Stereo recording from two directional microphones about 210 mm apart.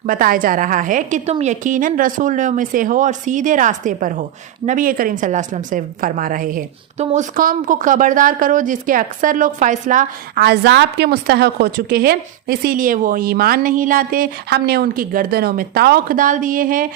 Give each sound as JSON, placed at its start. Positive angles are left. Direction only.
{"t": 0.0, "sound": "a woman's voice", "side_deg": -40}